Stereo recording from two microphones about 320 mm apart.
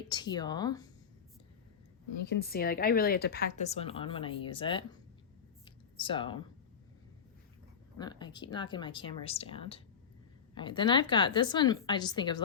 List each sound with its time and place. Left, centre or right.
0.1 s speech: centre
2.2 s speech: left; by 4.9 s centre
5.6 s a sound: centre
7.9 s speech: centre